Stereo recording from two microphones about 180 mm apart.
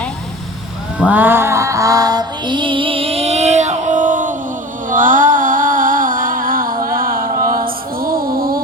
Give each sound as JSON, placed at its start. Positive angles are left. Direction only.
{"t": 0.9, "sound": "music", "side_deg": -10}